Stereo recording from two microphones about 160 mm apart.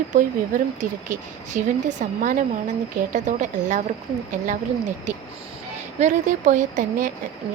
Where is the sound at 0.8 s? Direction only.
50° right (ahead or behind).